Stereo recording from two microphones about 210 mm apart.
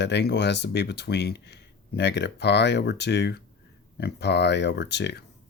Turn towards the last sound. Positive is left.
turn(degrees=55)  # may be behind; listen again after turning